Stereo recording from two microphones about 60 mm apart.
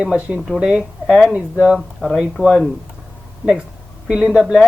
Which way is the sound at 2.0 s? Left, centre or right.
Centre.